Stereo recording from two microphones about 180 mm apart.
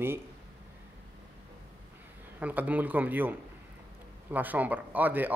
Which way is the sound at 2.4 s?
10° right (ahead or behind).